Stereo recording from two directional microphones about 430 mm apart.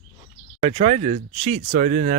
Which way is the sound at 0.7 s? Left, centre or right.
Centre.